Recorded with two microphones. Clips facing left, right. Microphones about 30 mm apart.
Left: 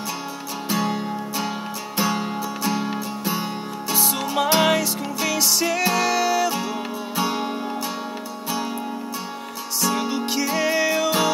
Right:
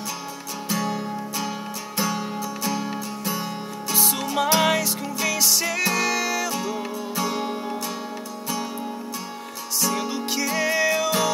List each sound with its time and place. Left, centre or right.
0.7 s music: centre
3.9 s music: centre
9.8 s music: centre